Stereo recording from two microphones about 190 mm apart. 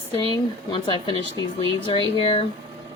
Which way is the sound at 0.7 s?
25° left (ahead or behind).